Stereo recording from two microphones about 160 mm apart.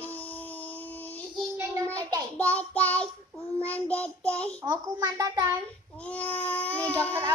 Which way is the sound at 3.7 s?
10° left (ahead or behind).